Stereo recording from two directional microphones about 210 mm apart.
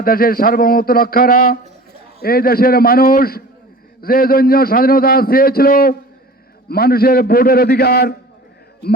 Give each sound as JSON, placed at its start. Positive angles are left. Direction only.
{"t": 0.0, "sound": "a man's voice", "side_deg": 45}